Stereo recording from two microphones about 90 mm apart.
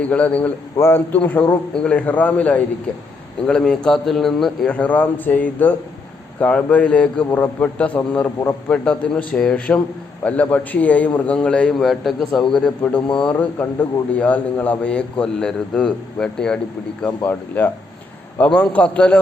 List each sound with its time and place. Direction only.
0.0 s a man's voice: 15° left (ahead or behind)
4.7 s a man's voice: 15° left (ahead or behind)
8.8 s a man's voice: 10° left (ahead or behind)